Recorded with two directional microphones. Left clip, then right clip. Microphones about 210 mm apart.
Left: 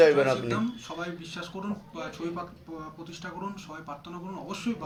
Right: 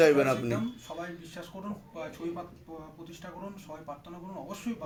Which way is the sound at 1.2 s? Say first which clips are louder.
Left 5 dB; 10° right (ahead or behind).